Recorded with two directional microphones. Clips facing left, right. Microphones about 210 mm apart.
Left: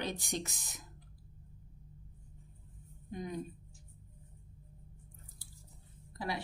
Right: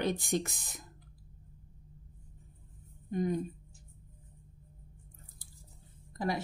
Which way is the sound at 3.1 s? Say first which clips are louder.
Right 8 dB; 50° right (ahead or behind).